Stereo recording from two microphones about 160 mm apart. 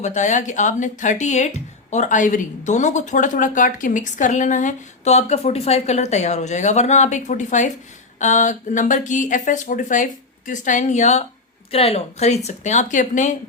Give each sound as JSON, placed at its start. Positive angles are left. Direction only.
{"t": 0.0, "sound": "speech", "side_deg": 50}